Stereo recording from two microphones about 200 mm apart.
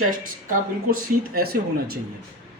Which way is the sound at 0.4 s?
45° right (ahead or behind).